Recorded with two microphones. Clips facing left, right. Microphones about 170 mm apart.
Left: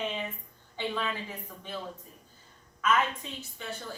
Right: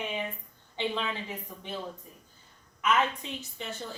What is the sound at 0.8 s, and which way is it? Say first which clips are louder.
Speech: right 1 dB; 20° right (ahead or behind).